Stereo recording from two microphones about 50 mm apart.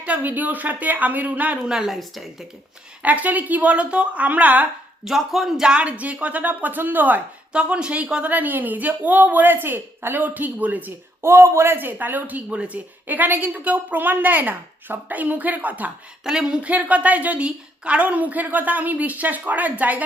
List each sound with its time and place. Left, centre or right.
0.2 s a woman's voice: right
1.6 s speech: centre
3.0 s a woman's voice: right
5.0 s speech: centre
5.6 s a woman's voice: right
7.5 s speech: centre
8.3 s a woman's voice: right
11.2 s speech: right
11.9 s a woman's voice: right
13.1 s a woman's voice: right
16.2 s speech: centre
16.6 s a woman's voice: right